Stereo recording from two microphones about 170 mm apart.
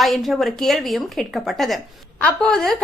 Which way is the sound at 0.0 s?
Centre (ahead or behind).